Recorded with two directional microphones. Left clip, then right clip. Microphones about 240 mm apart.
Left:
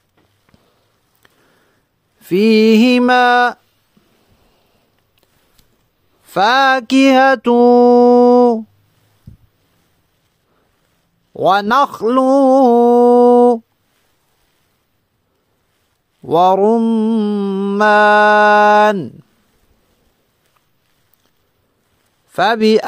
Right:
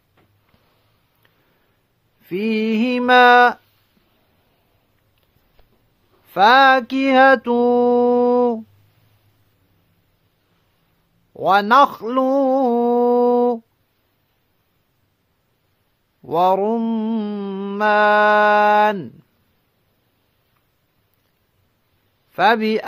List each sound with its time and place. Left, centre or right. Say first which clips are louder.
1.2 s a sound: left 8 dB; left
2.2 s mantra: left 11 dB; left
6.3 s mantra: even; left
11.3 s mantra: left 1 dB; left
16.2 s mantra: left 5 dB; left
22.3 s mantra: left 4 dB; left